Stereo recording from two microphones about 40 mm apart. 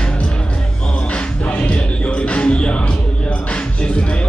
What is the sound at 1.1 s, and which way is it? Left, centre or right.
Music, left.